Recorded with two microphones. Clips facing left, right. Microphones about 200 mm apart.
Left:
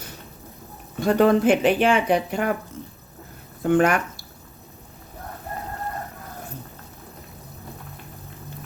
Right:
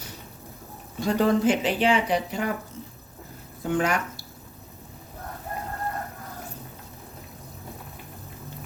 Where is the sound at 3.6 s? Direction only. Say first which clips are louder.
Left 6 dB; 55° left (ahead or behind).